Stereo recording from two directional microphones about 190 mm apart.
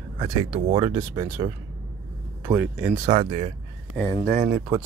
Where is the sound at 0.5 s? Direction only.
30° right (ahead or behind); by 3.0 s 10° right (ahead or behind).